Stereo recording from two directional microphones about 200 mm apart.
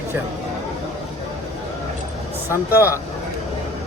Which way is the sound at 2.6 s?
10° right (ahead or behind).